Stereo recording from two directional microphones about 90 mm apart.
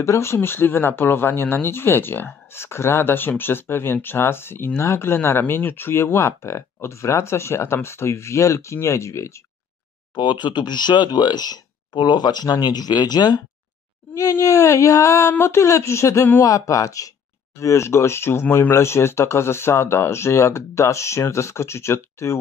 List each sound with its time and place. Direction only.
0.0 s speech: 30° left (ahead or behind)
10.1 s speech: 60° left (ahead or behind)
14.4 s speech: 40° left (ahead or behind)